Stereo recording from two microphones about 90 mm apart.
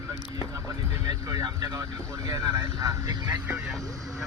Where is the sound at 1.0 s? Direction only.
40° right (ahead or behind).